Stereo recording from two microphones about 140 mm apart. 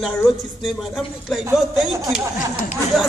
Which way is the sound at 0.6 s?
Centre (ahead or behind).